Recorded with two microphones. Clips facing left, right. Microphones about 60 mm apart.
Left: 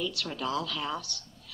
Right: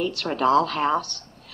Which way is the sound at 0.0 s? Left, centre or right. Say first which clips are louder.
Right 11 dB; right.